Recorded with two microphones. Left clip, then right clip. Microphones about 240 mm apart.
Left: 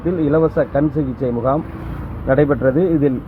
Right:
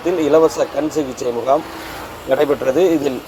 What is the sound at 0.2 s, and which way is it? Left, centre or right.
Speech, right.